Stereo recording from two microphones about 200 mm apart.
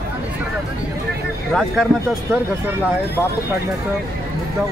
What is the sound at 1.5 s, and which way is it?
Speech, 5° left (ahead or behind).